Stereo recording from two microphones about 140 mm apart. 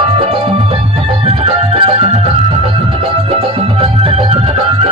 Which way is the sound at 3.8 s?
40° right (ahead or behind).